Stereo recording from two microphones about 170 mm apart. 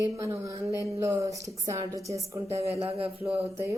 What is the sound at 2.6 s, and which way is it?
Speech, 35° right (ahead or behind).